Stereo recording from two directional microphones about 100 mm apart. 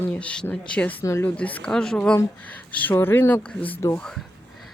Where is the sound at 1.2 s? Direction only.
15° left (ahead or behind).